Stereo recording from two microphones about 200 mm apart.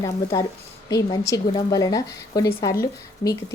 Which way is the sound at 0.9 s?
20° left (ahead or behind).